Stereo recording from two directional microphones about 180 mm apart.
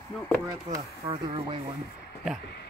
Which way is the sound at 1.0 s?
30° right (ahead or behind).